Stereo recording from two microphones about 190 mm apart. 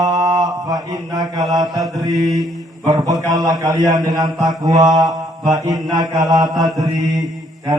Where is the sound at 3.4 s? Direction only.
20° right (ahead or behind).